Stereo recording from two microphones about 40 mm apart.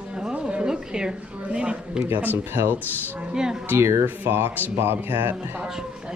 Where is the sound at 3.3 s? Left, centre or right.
Centre.